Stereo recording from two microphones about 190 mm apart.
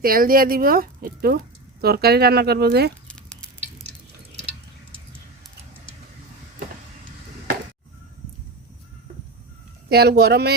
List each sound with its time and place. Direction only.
0.0 s speech: 50° right (ahead or behind)
3.1 s a sound: 5° left (ahead or behind)
9.9 s speech: 60° right (ahead or behind)